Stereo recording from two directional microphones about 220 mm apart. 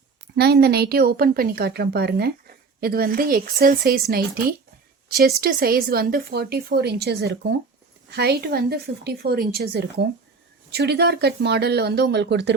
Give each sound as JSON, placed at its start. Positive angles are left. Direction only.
{"t": 0.3, "sound": "a woman's voice", "side_deg": -45}